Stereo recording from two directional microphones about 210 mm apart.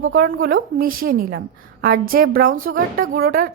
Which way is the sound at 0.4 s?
45° right (ahead or behind).